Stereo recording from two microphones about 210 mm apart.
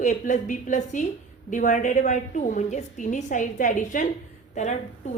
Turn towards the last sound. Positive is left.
turn(degrees=35)  # may be behind; listen again after turning